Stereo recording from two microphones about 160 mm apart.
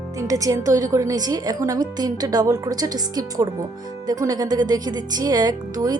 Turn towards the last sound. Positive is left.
turn(degrees=-25)  # may be behind; listen again after turning